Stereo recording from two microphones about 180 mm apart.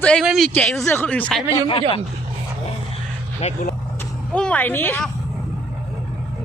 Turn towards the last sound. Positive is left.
turn(degrees=10)  # may be behind; listen again after turning